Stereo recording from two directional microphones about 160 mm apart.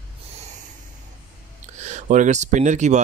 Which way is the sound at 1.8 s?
50° right (ahead or behind).